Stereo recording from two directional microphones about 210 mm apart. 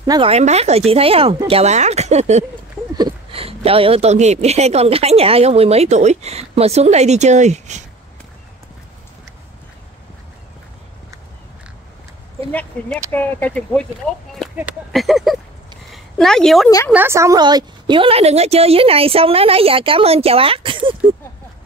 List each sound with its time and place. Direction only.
0.0 s speech: 20° right (ahead or behind)
0.3 s a woman's voice: 30° right (ahead or behind)
13.1 s speech: 10° left (ahead or behind)
16.9 s a woman's voice: 10° right (ahead or behind)